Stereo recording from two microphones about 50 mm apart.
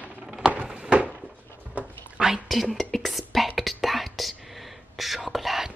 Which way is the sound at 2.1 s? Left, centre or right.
Centre.